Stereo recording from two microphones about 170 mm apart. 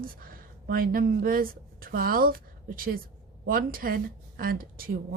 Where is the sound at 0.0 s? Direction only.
60° right (ahead or behind).